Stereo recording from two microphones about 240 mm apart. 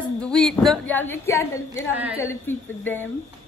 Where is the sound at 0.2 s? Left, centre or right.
Centre.